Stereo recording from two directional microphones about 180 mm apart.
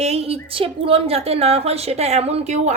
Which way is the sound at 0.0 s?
35° right (ahead or behind).